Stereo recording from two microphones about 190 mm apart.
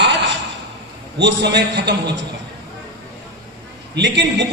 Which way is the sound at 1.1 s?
65° right (ahead or behind).